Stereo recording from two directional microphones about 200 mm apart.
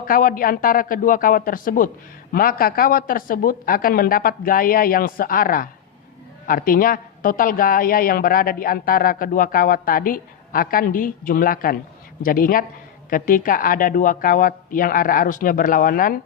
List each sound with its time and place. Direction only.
0.0 s a woman's voice: 45° left (ahead or behind)